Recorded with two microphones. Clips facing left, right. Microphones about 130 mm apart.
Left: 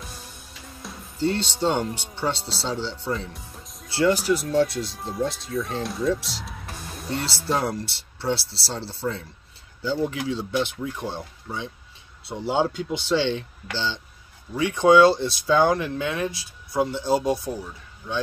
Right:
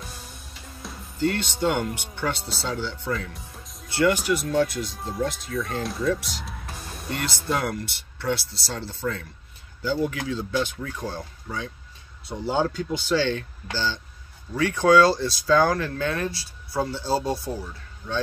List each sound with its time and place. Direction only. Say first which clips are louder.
0.7 s music: even; centre (ahead or behind)
1.2 s speech: even; 30° left (ahead or behind)
3.3 s music: even; centre (ahead or behind)
3.9 s speech: left 1 dB; 30° left (ahead or behind)
4.4 s speech: left 1 dB; 5° left (ahead or behind)
7.1 s speech: left 1 dB; 30° left (ahead or behind)
12.5 s speech: left 1 dB; 15° left (ahead or behind)